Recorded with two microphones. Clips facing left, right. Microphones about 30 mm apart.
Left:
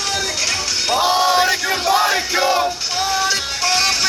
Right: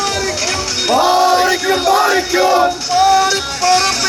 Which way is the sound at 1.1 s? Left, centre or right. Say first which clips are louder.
Right 2 dB; centre.